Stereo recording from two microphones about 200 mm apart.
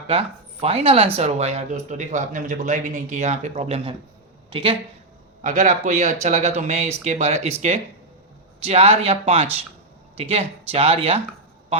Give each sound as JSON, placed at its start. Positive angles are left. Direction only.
{"t": 0.1, "sound": "speech", "side_deg": -30}
{"t": 5.4, "sound": "speech", "side_deg": -40}
{"t": 8.6, "sound": "speech", "side_deg": -30}